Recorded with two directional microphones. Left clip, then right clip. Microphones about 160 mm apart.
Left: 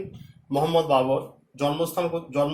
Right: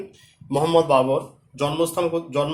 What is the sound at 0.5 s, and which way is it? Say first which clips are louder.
A man's voice: right 4 dB; 50° right (ahead or behind).